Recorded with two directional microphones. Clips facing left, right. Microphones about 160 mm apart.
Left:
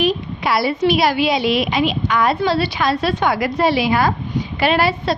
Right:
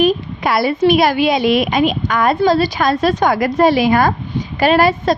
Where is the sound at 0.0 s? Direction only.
50° right (ahead or behind).